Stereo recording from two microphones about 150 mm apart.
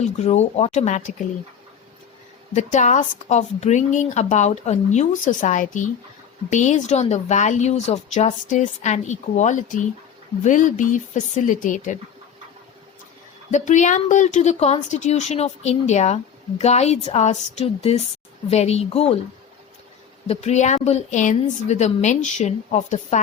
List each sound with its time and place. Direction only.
0.0 s speech: 45° left (ahead or behind)
2.5 s speech: 55° left (ahead or behind)
13.5 s speech: 55° left (ahead or behind)
20.2 s speech: 45° left (ahead or behind)